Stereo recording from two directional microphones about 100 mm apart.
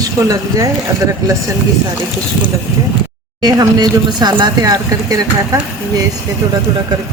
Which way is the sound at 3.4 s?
40° right (ahead or behind).